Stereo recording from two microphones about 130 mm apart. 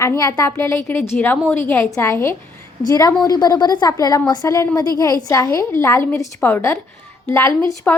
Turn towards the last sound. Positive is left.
turn(degrees=25)  # may be behind; listen again after turning